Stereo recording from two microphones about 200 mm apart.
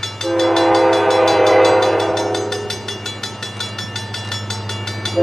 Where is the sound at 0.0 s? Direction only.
Centre (ahead or behind).